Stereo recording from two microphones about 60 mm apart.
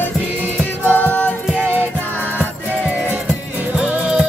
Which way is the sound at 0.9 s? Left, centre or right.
Left.